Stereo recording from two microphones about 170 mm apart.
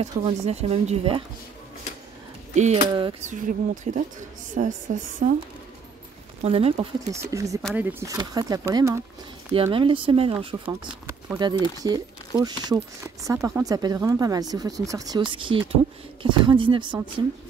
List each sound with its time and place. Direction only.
0.0 s speech: 40° right (ahead or behind)
2.5 s speech: 45° right (ahead or behind)
5.2 s speech: 40° right (ahead or behind)
6.4 s speech: 35° right (ahead or behind)
7.2 s speech: 20° right (ahead or behind)
9.5 s speech: 30° right (ahead or behind)